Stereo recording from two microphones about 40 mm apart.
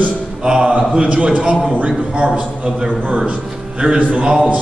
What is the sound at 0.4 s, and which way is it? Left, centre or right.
A man's voice, right.